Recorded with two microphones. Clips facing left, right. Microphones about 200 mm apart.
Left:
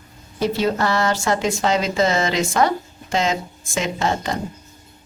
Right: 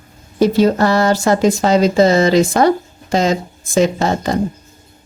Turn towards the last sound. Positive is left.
turn(degrees=-35)  # may be behind; listen again after turning